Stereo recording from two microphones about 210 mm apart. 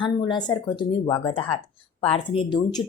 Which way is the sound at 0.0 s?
20° left (ahead or behind).